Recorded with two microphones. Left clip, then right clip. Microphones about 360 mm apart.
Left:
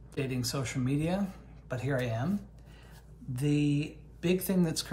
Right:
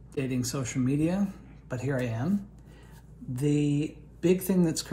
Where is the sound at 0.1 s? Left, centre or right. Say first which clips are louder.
Right 3 dB; centre.